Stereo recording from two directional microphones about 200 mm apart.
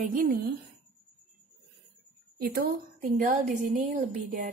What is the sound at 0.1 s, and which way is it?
Speech, 45° right (ahead or behind).